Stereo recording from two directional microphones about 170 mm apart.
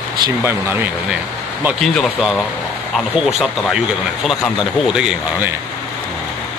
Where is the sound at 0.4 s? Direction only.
15° right (ahead or behind).